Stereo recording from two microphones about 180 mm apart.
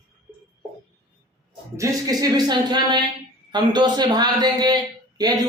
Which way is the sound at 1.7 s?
20° right (ahead or behind).